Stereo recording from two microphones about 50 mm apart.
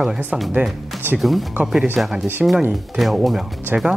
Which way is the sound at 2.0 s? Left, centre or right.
Centre.